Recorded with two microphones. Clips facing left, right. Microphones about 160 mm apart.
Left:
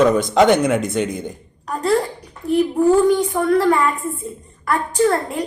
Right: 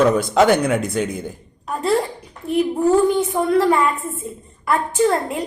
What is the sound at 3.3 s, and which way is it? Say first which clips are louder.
Speech: even; 15° right (ahead or behind).